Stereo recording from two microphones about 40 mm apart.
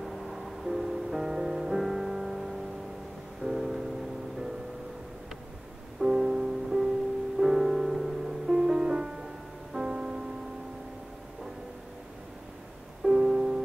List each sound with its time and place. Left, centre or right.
0.0 s music: centre
5.9 s music: centre
13.0 s music: centre